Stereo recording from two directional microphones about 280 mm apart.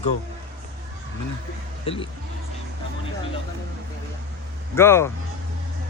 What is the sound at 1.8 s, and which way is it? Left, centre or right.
Speech, centre.